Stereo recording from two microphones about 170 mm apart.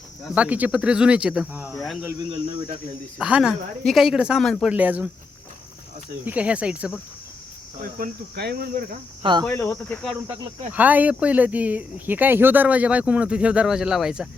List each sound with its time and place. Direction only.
0.3 s speech: 10° right (ahead or behind)
3.2 s a woman's voice: 5° right (ahead or behind)
6.2 s speech: 10° right (ahead or behind)
7.9 s cricket: 60° right (ahead or behind)
9.2 s speech: 25° right (ahead or behind)
9.5 s speech: 10° left (ahead or behind)
10.0 s a woman's voice: 5° right (ahead or behind)